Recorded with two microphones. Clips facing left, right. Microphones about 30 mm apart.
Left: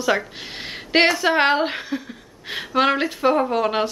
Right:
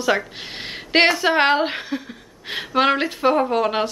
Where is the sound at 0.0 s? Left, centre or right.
Centre.